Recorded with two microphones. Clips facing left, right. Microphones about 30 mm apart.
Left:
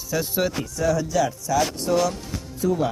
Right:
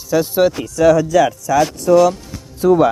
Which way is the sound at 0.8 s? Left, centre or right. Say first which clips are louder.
Right 12 dB; right.